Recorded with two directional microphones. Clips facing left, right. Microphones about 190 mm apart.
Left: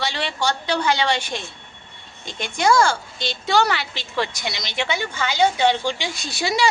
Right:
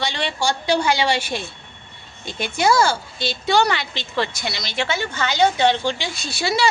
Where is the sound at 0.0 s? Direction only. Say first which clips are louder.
Right 1 dB; centre (ahead or behind).